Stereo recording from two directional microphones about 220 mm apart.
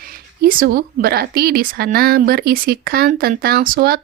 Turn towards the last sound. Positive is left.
turn(degrees=-45)  # may be behind; listen again after turning